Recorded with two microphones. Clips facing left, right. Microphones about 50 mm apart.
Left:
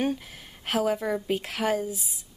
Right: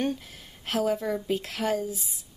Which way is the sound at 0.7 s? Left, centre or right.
Centre.